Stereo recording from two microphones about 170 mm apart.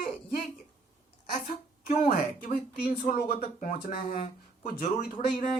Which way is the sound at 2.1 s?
55° left (ahead or behind).